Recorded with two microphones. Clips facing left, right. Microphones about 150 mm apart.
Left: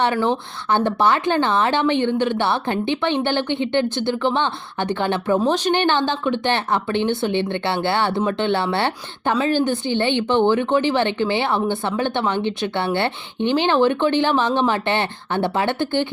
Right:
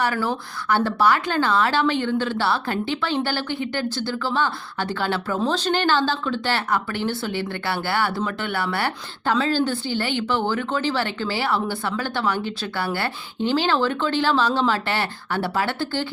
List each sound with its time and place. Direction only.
0.0 s speech: 25° left (ahead or behind)